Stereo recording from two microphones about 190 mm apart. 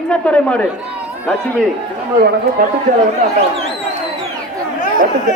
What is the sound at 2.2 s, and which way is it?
Speech, 60° right (ahead or behind).